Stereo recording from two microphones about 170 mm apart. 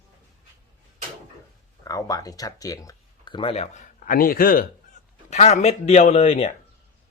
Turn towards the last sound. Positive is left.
turn(degrees=35)  # may be behind; listen again after turning